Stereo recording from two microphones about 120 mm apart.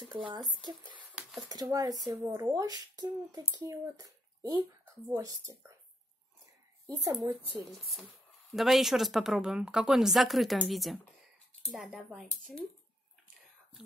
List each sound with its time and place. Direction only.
0.1 s speech: 40° right (ahead or behind)
6.9 s speech: 35° right (ahead or behind)
7.6 s speech: centre (ahead or behind)